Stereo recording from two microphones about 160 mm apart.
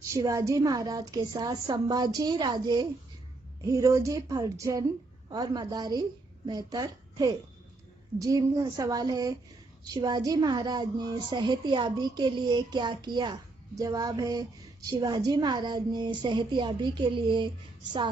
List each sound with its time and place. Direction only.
0.0 s a woman's voice: 20° right (ahead or behind)